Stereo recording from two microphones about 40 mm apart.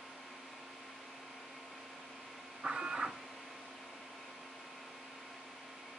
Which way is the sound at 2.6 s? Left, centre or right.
Centre.